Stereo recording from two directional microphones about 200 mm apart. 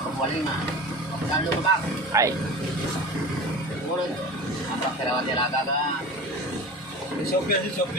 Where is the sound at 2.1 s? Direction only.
15° right (ahead or behind).